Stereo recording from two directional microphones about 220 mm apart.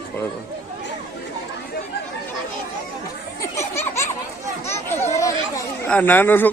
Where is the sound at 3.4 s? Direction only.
15° left (ahead or behind).